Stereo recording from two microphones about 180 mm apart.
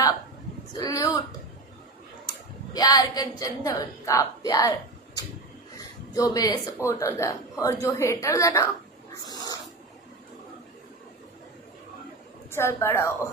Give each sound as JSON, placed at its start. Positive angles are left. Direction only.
{"t": 0.7, "sound": "a woman's voice", "side_deg": 20}
{"t": 2.7, "sound": "a woman's voice", "side_deg": 20}
{"t": 6.1, "sound": "speech", "side_deg": 20}
{"t": 9.2, "sound": "cat", "side_deg": 20}
{"t": 12.5, "sound": "speech", "side_deg": 15}